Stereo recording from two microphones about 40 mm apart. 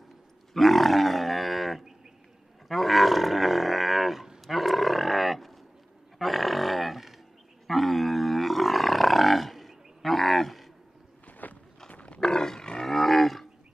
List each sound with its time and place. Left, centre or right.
0.5 s wild animals: centre
2.7 s roaring cats: centre
4.5 s livestock: centre
6.1 s a sound: centre
7.6 s roar: centre
11.4 s walk: left
11.9 s roaring cats: left
12.2 s roaring cats: centre
12.8 s roaring cats: centre